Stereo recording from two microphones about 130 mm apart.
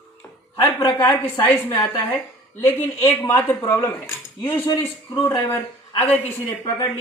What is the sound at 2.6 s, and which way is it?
A man's voice, 15° left (ahead or behind).